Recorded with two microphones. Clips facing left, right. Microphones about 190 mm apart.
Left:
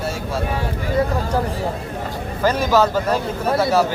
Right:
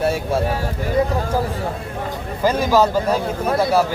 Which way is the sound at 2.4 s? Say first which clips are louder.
Right 1 dB; 10° right (ahead or behind).